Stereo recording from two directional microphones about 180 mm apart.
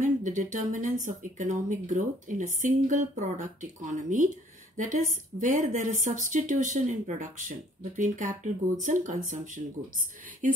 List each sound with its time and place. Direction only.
0.0 s speech: 45° right (ahead or behind)